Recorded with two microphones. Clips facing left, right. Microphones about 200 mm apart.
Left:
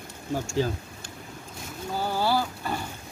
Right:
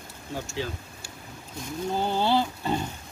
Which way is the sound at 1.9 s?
20° right (ahead or behind).